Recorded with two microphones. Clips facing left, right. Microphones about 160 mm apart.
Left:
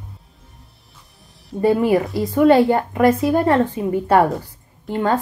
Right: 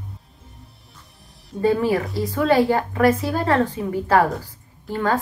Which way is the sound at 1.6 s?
25° left (ahead or behind).